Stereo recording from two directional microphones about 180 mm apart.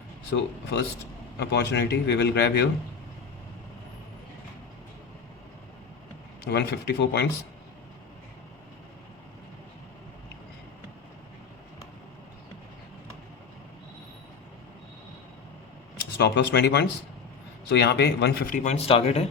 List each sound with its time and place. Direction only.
0.3 s speech: 70° left (ahead or behind)
6.4 s speech: 70° left (ahead or behind)
16.1 s speech: 70° left (ahead or behind); by 19.3 s 35° left (ahead or behind)